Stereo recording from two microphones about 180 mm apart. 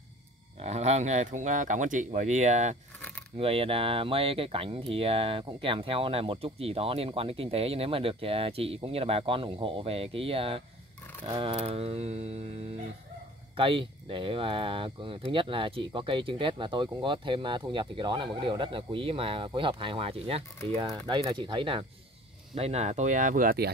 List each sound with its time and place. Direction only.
0.6 s speech: 40° right (ahead or behind); by 23.7 s 55° right (ahead or behind)